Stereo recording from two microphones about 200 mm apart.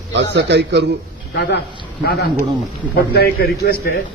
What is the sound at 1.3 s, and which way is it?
Speech, 55° left (ahead or behind).